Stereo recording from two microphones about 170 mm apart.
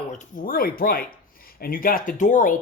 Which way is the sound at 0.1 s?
50° left (ahead or behind).